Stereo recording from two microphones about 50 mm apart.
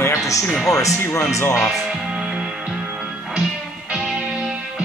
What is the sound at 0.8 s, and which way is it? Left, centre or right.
Speech, left.